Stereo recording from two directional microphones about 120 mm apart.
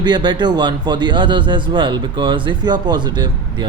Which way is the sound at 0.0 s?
40° right (ahead or behind).